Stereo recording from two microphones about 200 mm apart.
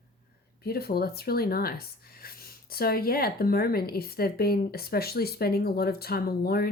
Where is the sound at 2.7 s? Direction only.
50° left (ahead or behind).